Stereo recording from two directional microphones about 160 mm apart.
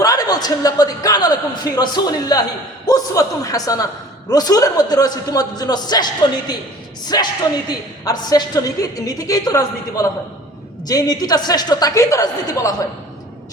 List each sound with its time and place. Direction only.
0.0 s a man's voice: 25° left (ahead or behind)
7.1 s a man's voice: 25° left (ahead or behind)